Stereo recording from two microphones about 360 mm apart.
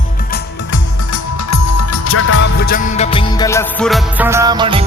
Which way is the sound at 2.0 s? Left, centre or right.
Left.